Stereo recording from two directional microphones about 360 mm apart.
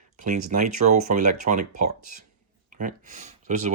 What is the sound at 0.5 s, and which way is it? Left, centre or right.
Speech, right.